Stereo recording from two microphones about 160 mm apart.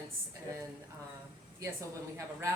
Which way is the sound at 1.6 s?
15° right (ahead or behind).